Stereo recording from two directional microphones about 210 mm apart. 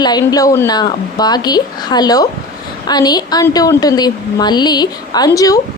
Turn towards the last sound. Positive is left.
turn(degrees=15)  # may be behind; listen again after turning